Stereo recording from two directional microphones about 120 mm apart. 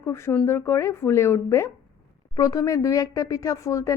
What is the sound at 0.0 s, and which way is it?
Speech, 20° left (ahead or behind).